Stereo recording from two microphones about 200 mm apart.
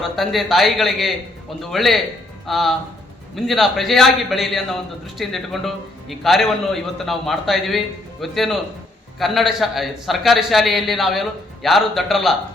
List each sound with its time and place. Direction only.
0.0 s a man's voice: centre (ahead or behind)